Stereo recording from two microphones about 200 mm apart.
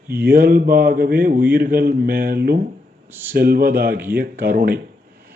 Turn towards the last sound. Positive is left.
turn(degrees=-45)  # may be behind; listen again after turning